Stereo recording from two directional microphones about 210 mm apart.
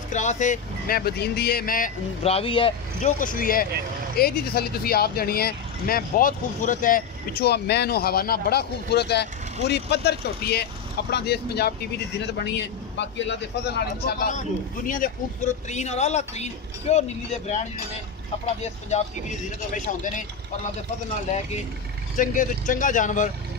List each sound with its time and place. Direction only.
0.1 s speech: 35° left (ahead or behind)
2.2 s a man's voice: 25° left (ahead or behind); by 14.3 s 50° left (ahead or behind)
14.9 s a man's voice: 40° left (ahead or behind)
18.6 s a man's voice: 35° left (ahead or behind)
22.1 s a man's voice: 40° left (ahead or behind)